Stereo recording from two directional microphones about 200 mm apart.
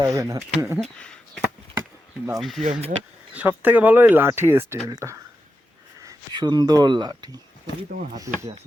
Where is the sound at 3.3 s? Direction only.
10° right (ahead or behind).